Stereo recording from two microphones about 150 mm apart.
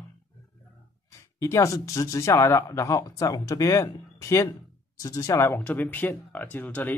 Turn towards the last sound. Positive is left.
turn(degrees=10)  # may be behind; listen again after turning